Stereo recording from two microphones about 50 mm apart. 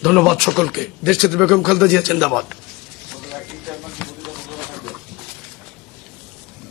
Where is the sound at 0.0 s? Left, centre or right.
Centre.